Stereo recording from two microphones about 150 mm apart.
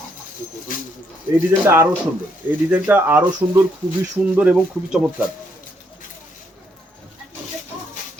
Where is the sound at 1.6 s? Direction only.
20° right (ahead or behind).